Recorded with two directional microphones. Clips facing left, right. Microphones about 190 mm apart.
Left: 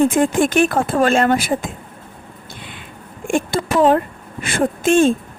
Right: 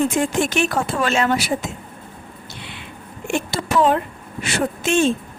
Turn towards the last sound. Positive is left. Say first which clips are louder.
# left 4 dB
turn(degrees=50)  # may be behind; listen again after turning